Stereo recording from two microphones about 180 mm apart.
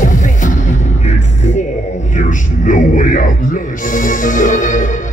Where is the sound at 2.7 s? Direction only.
45° left (ahead or behind).